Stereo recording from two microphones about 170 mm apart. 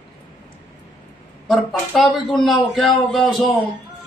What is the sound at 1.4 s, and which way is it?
A man's voice, 5° left (ahead or behind).